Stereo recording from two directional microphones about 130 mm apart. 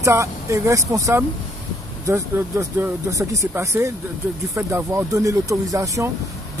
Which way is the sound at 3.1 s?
25° right (ahead or behind).